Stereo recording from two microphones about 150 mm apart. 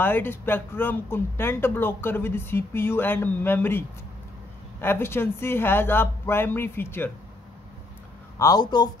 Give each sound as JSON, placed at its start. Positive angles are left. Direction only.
{"t": 0.0, "sound": "speech", "side_deg": 15}
{"t": 8.4, "sound": "speech", "side_deg": 25}